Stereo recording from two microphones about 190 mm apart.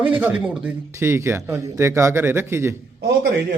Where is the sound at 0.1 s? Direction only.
10° right (ahead or behind).